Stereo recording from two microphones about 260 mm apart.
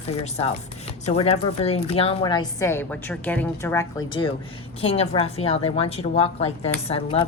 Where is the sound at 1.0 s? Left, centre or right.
Left.